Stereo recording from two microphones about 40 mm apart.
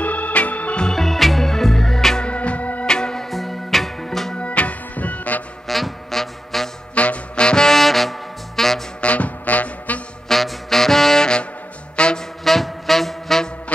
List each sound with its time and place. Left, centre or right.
0.0 s organ: left
0.9 s music: centre
2.2 s music: left
2.9 s music: centre
3.3 s music: centre
4.4 s music: left
5.7 s music: centre
7.0 s music: left
7.6 s brass instrument: centre
9.0 s music: left
10.2 s saxophone: centre
12.0 s music: left
12.4 s music: centre